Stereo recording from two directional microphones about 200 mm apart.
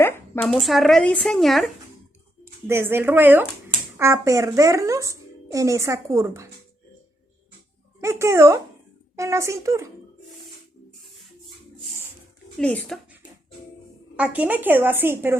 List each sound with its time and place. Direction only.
0.0 s a sound: 10° left (ahead or behind)
0.5 s speech: centre (ahead or behind)
2.4 s a woman's voice: 10° right (ahead or behind)
8.0 s a woman's voice: 15° right (ahead or behind)
12.5 s speech: 5° left (ahead or behind)
14.2 s a woman's voice: 10° right (ahead or behind)